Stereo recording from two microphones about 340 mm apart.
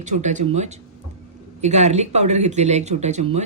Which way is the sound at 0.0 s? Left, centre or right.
Right.